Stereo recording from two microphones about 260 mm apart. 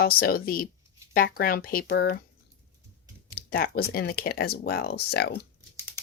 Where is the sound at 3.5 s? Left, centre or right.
Left.